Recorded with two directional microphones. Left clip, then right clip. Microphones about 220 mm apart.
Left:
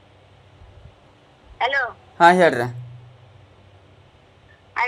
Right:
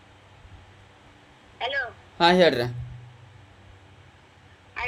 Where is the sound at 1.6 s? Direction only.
20° left (ahead or behind).